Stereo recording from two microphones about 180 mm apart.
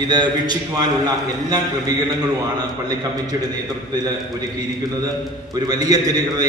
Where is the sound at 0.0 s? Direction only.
25° right (ahead or behind).